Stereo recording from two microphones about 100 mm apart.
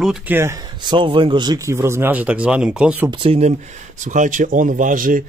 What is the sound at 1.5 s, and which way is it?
Speech, 30° right (ahead or behind).